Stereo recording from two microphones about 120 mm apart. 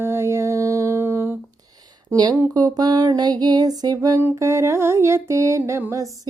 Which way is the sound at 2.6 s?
30° right (ahead or behind).